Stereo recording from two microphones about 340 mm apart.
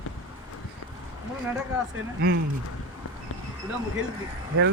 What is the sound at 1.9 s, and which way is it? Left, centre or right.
Speech, right.